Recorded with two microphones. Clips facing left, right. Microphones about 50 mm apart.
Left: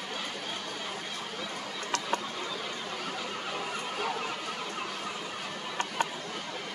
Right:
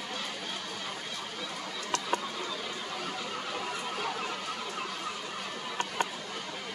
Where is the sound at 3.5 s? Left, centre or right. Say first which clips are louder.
Left 1 dB; centre.